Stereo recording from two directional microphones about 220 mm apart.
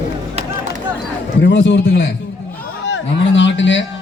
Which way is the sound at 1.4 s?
55° left (ahead or behind).